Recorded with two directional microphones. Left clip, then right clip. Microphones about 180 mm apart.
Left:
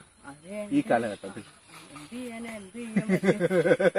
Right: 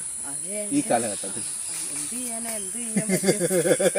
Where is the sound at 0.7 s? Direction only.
15° right (ahead or behind).